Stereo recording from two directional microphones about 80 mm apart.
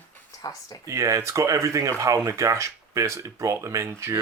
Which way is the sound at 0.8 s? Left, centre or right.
Right.